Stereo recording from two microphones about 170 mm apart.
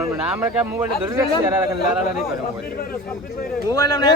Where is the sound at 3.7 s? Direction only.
20° left (ahead or behind).